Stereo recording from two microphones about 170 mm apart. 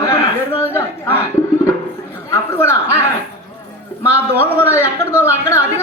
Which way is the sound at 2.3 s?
15° left (ahead or behind).